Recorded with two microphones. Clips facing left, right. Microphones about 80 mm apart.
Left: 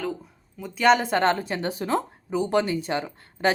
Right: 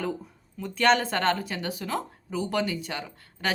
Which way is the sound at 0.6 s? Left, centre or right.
Centre.